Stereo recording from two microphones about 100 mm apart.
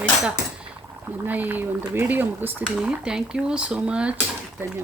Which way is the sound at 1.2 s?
20° right (ahead or behind).